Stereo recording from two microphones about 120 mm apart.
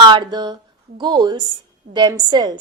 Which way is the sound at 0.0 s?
40° right (ahead or behind).